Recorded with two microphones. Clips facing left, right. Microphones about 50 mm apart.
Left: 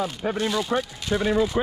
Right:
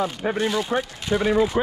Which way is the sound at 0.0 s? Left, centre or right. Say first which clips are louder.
Right 2 dB; right.